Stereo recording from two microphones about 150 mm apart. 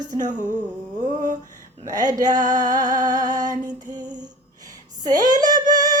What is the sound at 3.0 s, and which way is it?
Music, 25° right (ahead or behind).